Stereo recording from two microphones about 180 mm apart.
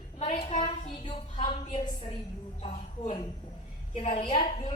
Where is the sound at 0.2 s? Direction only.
35° left (ahead or behind).